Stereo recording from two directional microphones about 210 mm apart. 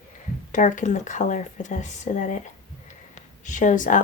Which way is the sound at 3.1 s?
35° left (ahead or behind).